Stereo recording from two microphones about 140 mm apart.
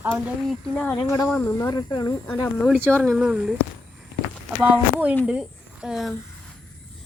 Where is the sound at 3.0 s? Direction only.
5° right (ahead or behind).